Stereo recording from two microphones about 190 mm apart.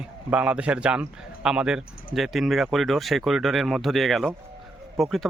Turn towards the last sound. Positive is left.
turn(degrees=0)  # may be behind; listen again after turning